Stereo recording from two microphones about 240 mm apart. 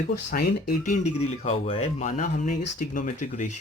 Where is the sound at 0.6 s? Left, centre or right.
Left.